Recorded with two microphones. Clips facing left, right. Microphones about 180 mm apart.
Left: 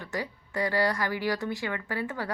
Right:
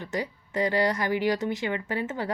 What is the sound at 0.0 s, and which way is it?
A woman's voice, 20° right (ahead or behind).